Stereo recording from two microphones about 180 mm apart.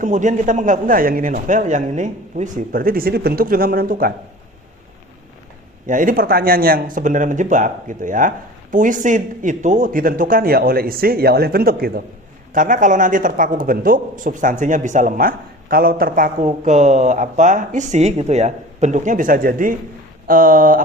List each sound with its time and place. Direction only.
0.0 s a man's voice: 45° right (ahead or behind)
5.8 s a man's voice: 45° right (ahead or behind)